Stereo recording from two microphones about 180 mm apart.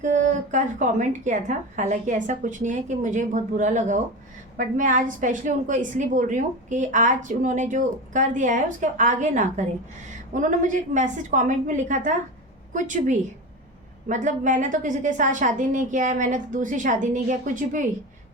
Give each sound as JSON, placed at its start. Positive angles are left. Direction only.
{"t": 0.0, "sound": "a woman's voice", "side_deg": -45}